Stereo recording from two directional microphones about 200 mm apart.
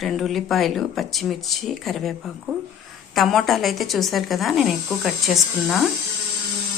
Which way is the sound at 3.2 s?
Centre (ahead or behind).